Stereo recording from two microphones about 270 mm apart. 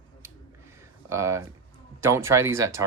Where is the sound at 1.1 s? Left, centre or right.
Centre.